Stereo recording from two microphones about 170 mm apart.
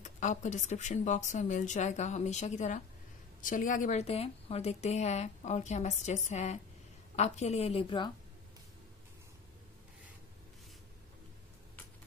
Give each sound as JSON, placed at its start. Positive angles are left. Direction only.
{"t": 0.0, "sound": "a woman's voice", "side_deg": 45}